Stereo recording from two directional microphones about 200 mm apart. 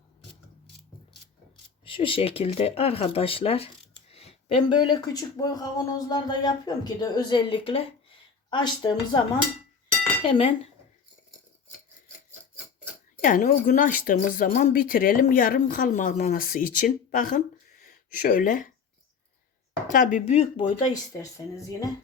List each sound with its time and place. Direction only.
1.8 s speech: 25° left (ahead or behind)
10.2 s speech: 30° left (ahead or behind)
13.2 s speech: 40° left (ahead or behind)
19.9 s speech: 40° left (ahead or behind)
20.8 s speech: 15° left (ahead or behind)